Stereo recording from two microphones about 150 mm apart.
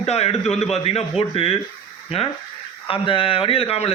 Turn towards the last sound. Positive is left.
turn(degrees=40)  # may be behind; listen again after turning